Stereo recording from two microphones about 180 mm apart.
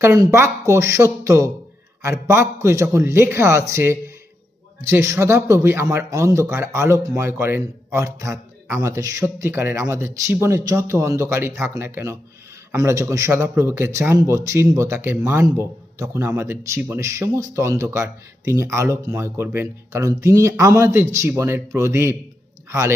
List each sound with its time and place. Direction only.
0.0 s a man's voice: 15° right (ahead or behind)